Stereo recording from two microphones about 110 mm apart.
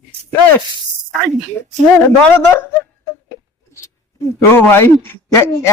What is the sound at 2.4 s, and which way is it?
Speech, 20° left (ahead or behind).